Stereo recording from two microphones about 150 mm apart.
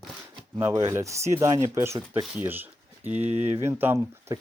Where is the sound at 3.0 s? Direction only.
50° right (ahead or behind).